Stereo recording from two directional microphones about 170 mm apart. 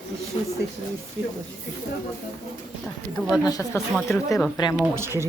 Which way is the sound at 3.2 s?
5° right (ahead or behind).